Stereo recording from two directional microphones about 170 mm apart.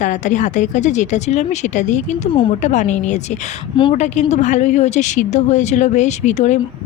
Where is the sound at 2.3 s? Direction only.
30° left (ahead or behind).